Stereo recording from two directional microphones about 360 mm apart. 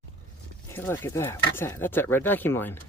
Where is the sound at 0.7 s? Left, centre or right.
Centre.